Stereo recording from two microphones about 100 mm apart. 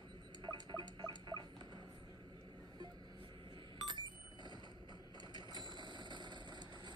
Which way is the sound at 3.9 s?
50° right (ahead or behind).